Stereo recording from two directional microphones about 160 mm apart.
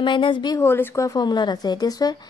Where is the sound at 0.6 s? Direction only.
15° left (ahead or behind).